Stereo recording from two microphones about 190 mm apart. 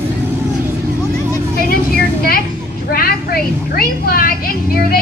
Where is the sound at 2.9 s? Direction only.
50° left (ahead or behind).